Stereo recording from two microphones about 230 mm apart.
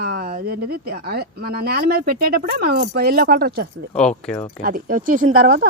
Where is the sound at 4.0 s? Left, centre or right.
Centre.